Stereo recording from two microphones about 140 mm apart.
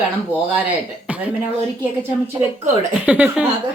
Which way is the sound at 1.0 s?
10° right (ahead or behind).